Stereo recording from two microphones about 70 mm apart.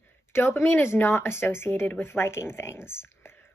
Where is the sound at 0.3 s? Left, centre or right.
Left.